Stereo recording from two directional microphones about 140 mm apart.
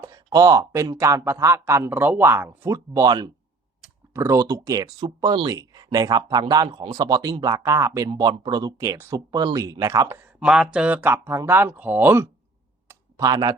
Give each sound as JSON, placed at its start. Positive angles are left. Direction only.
{"t": 0.1, "sound": "a man's voice", "side_deg": -25}
{"t": 8.1, "sound": "a man's voice", "side_deg": -35}
{"t": 10.2, "sound": "speech", "side_deg": -5}
{"t": 12.9, "sound": "clicking", "side_deg": -25}